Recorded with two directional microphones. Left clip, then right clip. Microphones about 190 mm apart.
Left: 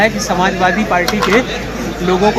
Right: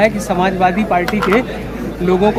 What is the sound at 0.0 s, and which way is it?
Speech, 25° right (ahead or behind).